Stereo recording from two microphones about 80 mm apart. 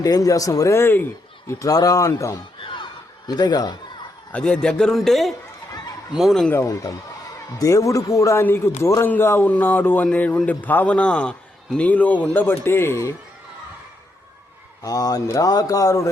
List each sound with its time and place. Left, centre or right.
0.0 s speech: left
0.8 s a man's voice: left
1.5 s speech: left
2.6 s a sound: left
4.3 s a man's voice: centre
5.7 s a sound: left
6.1 s speech: centre
6.6 s a man's voice: left
14.8 s speech: left